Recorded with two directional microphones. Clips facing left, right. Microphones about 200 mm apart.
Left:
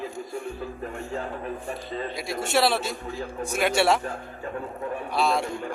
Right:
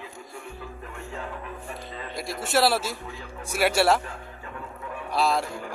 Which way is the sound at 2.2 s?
Centre (ahead or behind).